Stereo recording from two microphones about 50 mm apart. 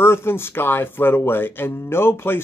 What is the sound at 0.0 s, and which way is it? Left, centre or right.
Speech, left.